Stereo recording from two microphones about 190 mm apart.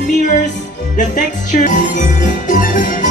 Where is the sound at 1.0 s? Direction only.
40° left (ahead or behind).